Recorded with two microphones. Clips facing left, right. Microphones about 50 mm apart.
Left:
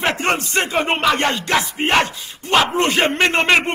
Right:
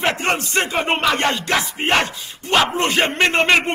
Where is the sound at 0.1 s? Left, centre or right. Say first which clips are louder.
Left 1 dB; left.